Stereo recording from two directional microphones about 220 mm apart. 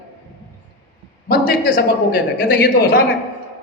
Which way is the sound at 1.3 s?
40° left (ahead or behind).